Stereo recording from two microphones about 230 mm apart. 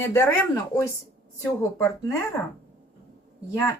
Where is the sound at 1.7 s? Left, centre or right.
Centre.